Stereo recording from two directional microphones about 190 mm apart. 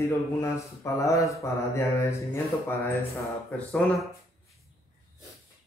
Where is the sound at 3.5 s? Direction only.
5° left (ahead or behind).